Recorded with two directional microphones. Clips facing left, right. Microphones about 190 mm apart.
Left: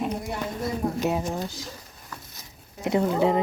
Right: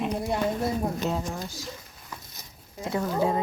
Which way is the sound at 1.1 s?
20° left (ahead or behind).